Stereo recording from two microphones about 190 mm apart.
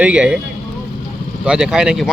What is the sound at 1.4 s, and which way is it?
Speech, 5° right (ahead or behind).